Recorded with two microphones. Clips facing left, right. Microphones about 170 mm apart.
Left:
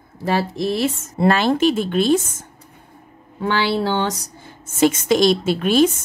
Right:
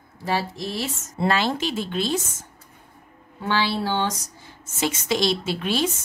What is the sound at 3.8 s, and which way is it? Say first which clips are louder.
Speech: left 4 dB; 60° left (ahead or behind).